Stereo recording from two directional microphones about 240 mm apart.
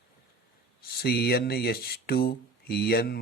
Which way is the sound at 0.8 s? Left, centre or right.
Left.